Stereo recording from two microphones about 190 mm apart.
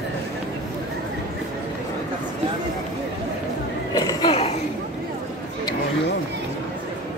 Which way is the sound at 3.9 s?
20° left (ahead or behind).